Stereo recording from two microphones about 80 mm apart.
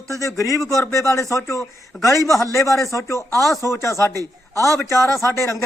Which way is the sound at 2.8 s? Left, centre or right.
Left.